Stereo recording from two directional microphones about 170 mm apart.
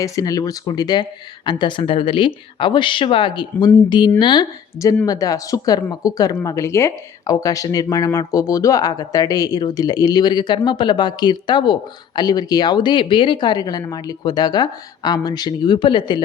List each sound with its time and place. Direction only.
0.0 s speech: 20° left (ahead or behind)